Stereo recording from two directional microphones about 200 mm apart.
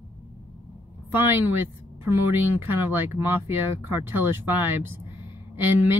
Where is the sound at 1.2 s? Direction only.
10° right (ahead or behind).